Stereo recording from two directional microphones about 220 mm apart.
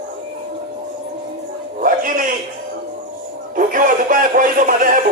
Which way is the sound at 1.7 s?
40° right (ahead or behind).